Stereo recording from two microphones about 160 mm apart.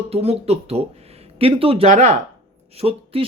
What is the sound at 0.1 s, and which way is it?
Speech, 40° right (ahead or behind).